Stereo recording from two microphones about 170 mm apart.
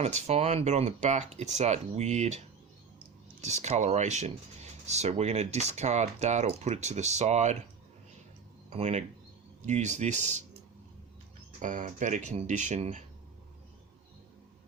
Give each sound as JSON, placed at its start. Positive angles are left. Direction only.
{"t": 0.0, "sound": "speech", "side_deg": -40}
{"t": 3.4, "sound": "speech", "side_deg": -40}
{"t": 8.7, "sound": "speech", "side_deg": -40}
{"t": 11.6, "sound": "speech", "side_deg": -50}